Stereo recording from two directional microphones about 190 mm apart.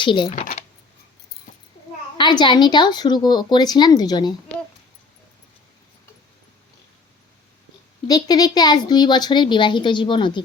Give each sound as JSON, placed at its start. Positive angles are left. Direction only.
{"t": 0.0, "sound": "speech", "side_deg": 25}
{"t": 2.1, "sound": "speech", "side_deg": 25}
{"t": 8.0, "sound": "speech", "side_deg": 20}